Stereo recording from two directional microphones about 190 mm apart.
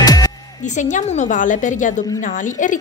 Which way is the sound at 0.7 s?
40° left (ahead or behind).